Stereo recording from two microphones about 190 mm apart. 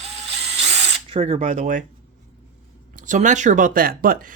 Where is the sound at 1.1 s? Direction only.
30° right (ahead or behind).